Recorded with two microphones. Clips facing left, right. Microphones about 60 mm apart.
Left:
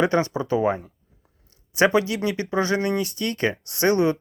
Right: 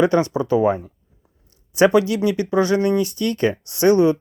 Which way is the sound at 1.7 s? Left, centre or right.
Left.